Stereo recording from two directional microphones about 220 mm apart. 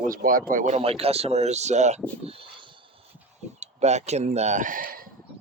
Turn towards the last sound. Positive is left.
turn(degrees=-40)  # may be behind; listen again after turning